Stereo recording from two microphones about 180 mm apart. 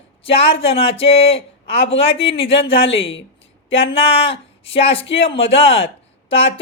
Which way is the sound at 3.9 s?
30° left (ahead or behind).